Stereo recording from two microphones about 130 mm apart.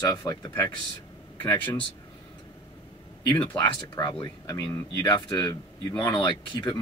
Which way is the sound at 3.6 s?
35° left (ahead or behind).